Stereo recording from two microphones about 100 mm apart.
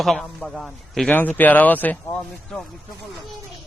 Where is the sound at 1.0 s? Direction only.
15° left (ahead or behind).